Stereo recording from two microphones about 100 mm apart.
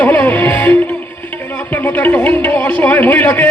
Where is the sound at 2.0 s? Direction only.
10° left (ahead or behind).